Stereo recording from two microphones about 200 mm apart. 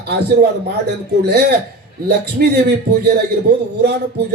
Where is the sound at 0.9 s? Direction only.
55° right (ahead or behind).